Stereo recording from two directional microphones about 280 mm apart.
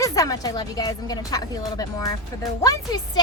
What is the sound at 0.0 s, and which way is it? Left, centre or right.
Speech, centre.